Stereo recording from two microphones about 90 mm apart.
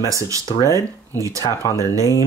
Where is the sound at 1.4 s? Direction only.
40° left (ahead or behind).